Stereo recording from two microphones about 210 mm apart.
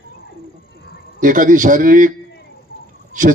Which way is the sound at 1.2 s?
40° right (ahead or behind).